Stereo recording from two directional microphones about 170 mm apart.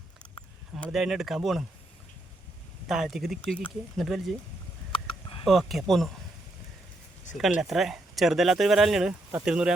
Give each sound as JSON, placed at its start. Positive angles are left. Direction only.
{"t": 0.9, "sound": "speech", "side_deg": 0}
{"t": 2.9, "sound": "speech", "side_deg": 0}
{"t": 4.9, "sound": "a sound", "side_deg": 30}
{"t": 5.5, "sound": "speech", "side_deg": 0}
{"t": 7.3, "sound": "speech", "side_deg": 0}